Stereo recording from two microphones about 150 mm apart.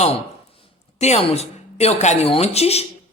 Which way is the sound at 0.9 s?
45° left (ahead or behind).